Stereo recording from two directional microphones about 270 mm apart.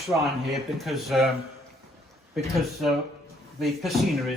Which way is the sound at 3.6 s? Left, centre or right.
Centre.